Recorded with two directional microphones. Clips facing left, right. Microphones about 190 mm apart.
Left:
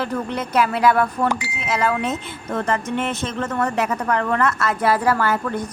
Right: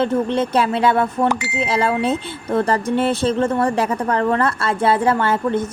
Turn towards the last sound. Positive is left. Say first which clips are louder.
# right 3 dB
turn(degrees=-25)  # may be behind; listen again after turning